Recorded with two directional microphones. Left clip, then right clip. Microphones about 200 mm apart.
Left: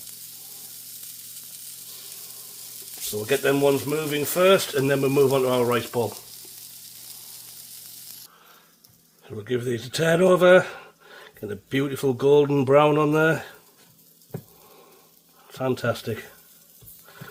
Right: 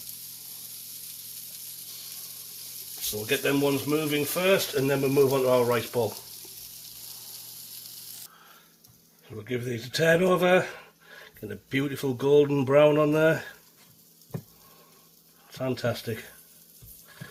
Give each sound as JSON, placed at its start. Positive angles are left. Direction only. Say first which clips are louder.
{"t": 3.2, "sound": "speech", "louder": "left 5 dB", "side_deg": 50}
{"t": 5.7, "sound": "frying", "louder": "left 2 dB", "side_deg": 30}
{"t": 9.4, "sound": "speech", "louder": "left 6 dB", "side_deg": 40}
{"t": 15.5, "sound": "speech", "louder": "left 4 dB", "side_deg": 40}